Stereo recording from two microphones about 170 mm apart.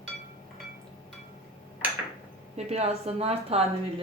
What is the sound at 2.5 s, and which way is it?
Speech, 40° right (ahead or behind).